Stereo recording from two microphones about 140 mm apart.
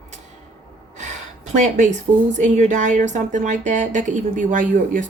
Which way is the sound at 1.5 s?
60° right (ahead or behind).